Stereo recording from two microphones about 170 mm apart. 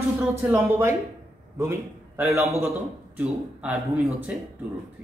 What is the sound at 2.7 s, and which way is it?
A man's voice, 5° right (ahead or behind).